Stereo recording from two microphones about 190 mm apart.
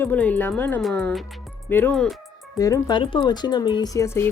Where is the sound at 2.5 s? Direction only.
20° left (ahead or behind).